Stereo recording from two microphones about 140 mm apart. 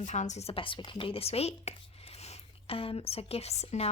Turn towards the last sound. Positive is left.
turn(degrees=50)  # may be behind; listen again after turning